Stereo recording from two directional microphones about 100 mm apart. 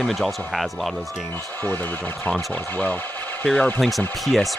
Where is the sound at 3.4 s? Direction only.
10° left (ahead or behind).